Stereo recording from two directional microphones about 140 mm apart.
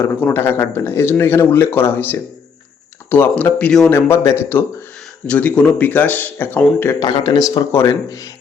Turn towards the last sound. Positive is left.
turn(degrees=20)  # may be behind; listen again after turning